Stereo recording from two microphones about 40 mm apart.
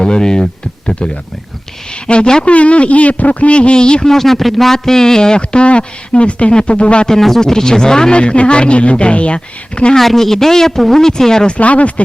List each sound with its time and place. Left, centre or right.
0.0 s a sound: centre
0.9 s a man's voice: left
4.1 s a man's voice: centre; by 7.1 s left
7.1 s speech: centre
8.2 s a man's voice: left
9.9 s speech: centre
11.5 s speech: left